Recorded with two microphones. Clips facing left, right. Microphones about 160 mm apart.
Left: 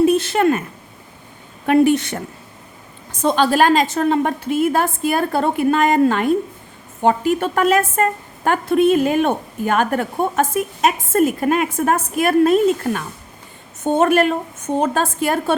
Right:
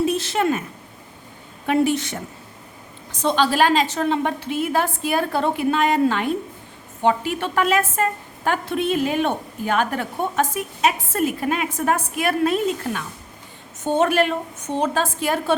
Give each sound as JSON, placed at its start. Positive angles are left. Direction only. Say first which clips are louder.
{"t": 0.0, "sound": "a sound", "louder": "left 6 dB", "side_deg": 55}
{"t": 1.6, "sound": "a woman's voice", "louder": "left 5 dB", "side_deg": 60}
{"t": 3.1, "sound": "a woman's voice", "louder": "left 3 dB", "side_deg": 50}